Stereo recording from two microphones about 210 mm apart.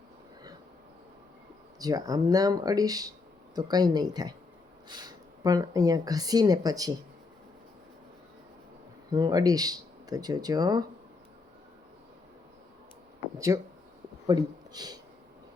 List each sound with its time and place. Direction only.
1.8 s speech: 15° right (ahead or behind)
9.1 s speech: 20° right (ahead or behind)
13.5 s speech: 15° right (ahead or behind)